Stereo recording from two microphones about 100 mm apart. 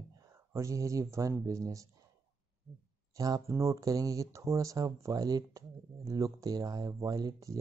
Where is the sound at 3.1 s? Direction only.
35° right (ahead or behind).